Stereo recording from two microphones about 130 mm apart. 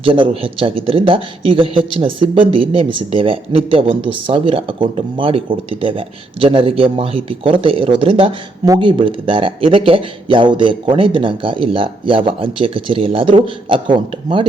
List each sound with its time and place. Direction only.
0.0 s speech: 40° right (ahead or behind)